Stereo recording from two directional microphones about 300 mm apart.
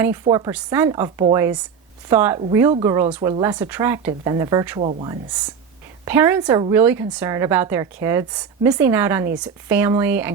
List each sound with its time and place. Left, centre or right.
0.0 s speech: centre
6.1 s speech: centre